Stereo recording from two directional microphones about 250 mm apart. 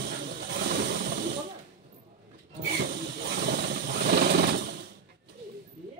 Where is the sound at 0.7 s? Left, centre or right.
Right.